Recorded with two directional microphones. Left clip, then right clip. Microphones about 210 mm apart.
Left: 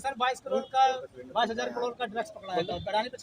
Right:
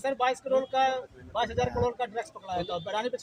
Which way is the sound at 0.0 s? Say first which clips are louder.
Right 2 dB; 25° right (ahead or behind).